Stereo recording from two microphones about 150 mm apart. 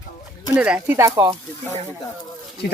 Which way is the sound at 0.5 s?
5° right (ahead or behind).